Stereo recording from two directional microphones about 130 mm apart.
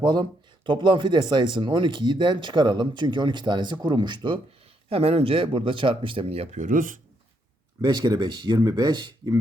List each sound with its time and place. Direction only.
0.0 s speech: 35° right (ahead or behind)
4.9 s speech: 45° right (ahead or behind)
6.6 s speech: 90° right
7.8 s speech: 35° right (ahead or behind)